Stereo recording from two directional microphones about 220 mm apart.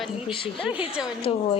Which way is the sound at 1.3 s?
25° left (ahead or behind).